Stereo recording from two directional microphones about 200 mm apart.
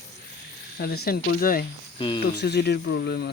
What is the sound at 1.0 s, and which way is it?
Speech, 50° left (ahead or behind).